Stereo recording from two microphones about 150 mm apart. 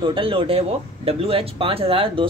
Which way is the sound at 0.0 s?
35° right (ahead or behind).